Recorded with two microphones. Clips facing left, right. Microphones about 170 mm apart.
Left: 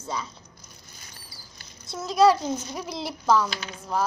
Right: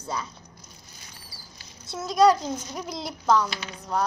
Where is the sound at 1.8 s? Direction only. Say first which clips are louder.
Even; centre (ahead or behind).